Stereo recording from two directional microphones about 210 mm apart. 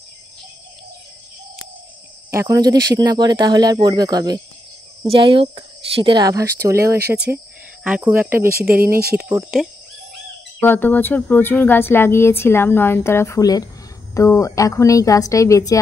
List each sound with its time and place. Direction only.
2.3 s speech: 20° right (ahead or behind)
8.5 s speech: 45° right (ahead or behind)
9.2 s speech: 5° right (ahead or behind)
10.6 s speech: 10° left (ahead or behind)